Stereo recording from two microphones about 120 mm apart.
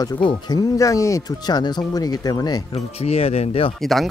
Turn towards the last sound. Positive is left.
turn(degrees=0)  # may be behind; listen again after turning